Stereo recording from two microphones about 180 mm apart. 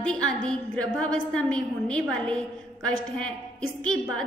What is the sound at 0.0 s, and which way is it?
A woman's voice, 5° left (ahead or behind).